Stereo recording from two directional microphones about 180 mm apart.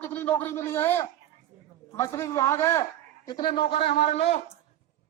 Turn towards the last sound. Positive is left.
turn(degrees=35)  # may be behind; listen again after turning